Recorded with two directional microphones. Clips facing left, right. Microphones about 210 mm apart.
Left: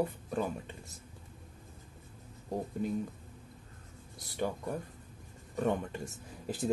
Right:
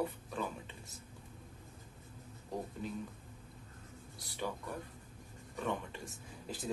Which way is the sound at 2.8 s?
50° left (ahead or behind).